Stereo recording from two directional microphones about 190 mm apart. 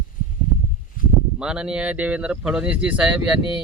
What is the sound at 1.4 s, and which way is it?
Speech, 5° right (ahead or behind).